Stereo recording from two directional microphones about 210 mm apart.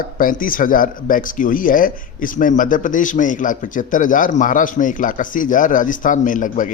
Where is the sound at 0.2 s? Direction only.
40° left (ahead or behind).